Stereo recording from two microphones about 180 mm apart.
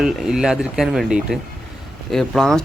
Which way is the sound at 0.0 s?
5° right (ahead or behind).